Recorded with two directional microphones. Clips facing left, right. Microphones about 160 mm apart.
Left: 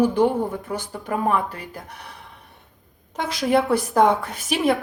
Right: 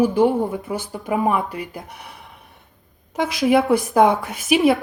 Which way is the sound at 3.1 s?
10° right (ahead or behind).